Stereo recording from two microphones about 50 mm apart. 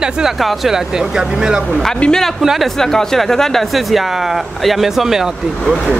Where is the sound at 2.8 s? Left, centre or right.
Centre.